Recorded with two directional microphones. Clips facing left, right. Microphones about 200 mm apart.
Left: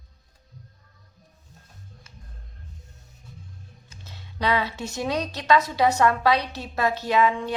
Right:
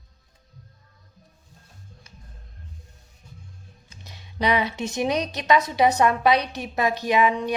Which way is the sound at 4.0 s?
15° right (ahead or behind).